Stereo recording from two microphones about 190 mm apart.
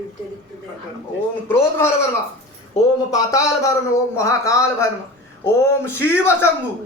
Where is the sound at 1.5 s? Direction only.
15° left (ahead or behind).